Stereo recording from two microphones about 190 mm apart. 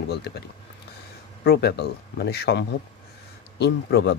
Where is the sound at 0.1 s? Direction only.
60° left (ahead or behind).